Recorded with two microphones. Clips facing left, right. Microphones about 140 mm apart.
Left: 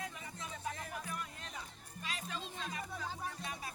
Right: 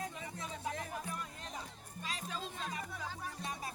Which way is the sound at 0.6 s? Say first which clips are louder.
Right 2 dB; 25° right (ahead or behind).